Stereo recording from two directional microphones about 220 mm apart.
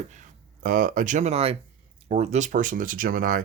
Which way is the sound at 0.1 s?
35° right (ahead or behind).